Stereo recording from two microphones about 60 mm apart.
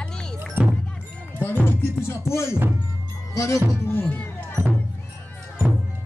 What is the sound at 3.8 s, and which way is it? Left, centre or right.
Speech, left.